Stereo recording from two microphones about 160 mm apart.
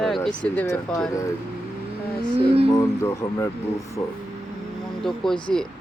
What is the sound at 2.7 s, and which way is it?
Speech, 20° left (ahead or behind).